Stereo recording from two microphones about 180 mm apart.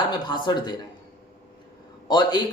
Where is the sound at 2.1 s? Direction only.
25° left (ahead or behind).